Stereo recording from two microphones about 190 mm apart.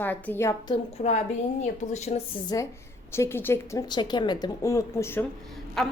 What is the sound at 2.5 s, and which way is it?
A woman's voice, 20° left (ahead or behind).